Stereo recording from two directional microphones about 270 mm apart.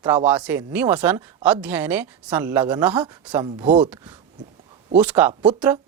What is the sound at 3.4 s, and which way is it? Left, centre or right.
Speech, centre.